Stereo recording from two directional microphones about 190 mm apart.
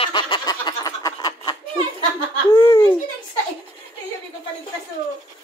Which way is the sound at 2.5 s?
15° left (ahead or behind).